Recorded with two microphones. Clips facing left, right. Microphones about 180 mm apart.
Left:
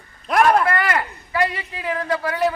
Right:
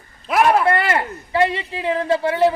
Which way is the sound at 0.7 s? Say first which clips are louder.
Right 3 dB; 25° right (ahead or behind).